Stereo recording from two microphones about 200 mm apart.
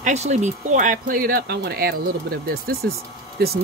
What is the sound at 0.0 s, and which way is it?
Speech, 35° right (ahead or behind).